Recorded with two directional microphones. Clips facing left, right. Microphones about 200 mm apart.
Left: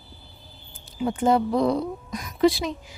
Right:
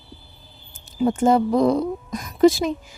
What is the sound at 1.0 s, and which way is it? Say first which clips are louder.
Speech: right 4 dB; 45° right (ahead or behind).